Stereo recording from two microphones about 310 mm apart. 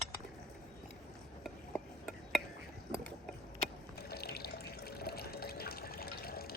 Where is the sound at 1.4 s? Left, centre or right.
Centre.